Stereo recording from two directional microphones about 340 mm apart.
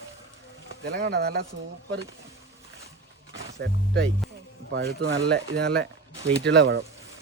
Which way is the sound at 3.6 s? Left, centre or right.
Right.